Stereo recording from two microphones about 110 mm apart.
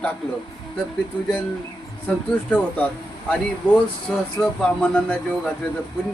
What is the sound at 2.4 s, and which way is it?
Speech, 10° left (ahead or behind).